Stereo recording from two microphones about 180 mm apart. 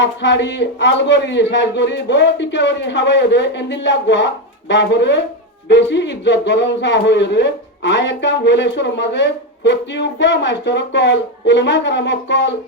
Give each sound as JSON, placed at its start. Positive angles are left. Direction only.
{"t": 0.0, "sound": "speech", "side_deg": 80}